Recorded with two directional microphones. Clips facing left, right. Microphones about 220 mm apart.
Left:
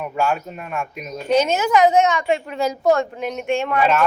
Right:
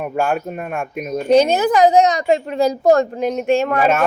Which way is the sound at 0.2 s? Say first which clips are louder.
Right 2 dB; 55° right (ahead or behind).